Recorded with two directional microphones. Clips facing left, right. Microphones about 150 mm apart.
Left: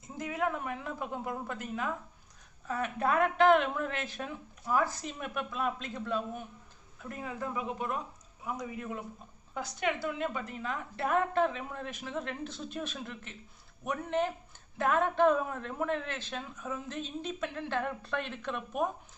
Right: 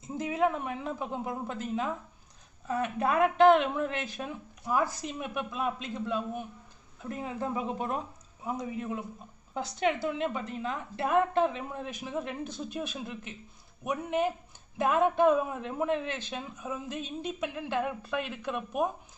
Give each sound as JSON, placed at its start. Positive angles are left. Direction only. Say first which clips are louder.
{"t": 0.2, "sound": "a woman's voice", "louder": "right 4 dB", "side_deg": -25}